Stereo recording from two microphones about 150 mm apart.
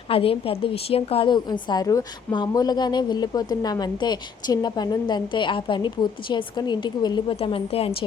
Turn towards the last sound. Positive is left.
turn(degrees=40)  # may be behind; listen again after turning